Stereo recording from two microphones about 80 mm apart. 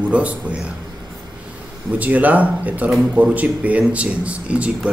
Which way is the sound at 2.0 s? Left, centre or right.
Centre.